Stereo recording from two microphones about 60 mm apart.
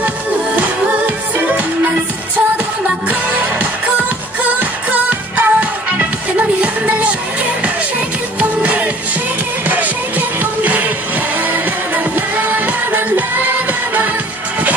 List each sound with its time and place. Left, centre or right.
3.1 s music: right
8.4 s music: right
11.4 s music of asia: right